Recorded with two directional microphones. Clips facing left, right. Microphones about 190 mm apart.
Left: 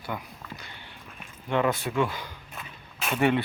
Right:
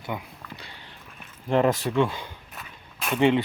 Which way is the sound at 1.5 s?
35° right (ahead or behind).